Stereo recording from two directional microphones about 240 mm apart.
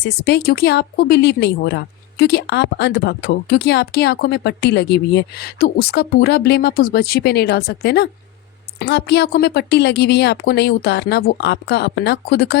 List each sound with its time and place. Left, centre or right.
0.0 s speech: left